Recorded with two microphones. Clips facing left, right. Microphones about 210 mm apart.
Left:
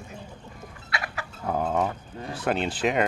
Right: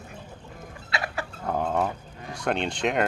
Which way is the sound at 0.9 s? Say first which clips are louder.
Right 3 dB; 25° right (ahead or behind).